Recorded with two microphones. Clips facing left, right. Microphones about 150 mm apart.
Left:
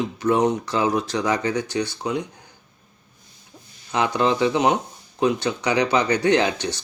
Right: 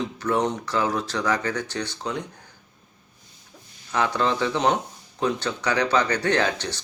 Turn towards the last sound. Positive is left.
turn(degrees=15)  # may be behind; listen again after turning